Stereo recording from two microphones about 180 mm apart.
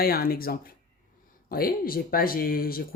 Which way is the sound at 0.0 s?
55° left (ahead or behind).